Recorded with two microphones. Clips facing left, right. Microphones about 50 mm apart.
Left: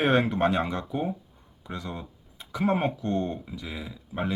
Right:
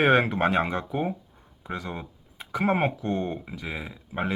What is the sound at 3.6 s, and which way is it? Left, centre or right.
Speech, right.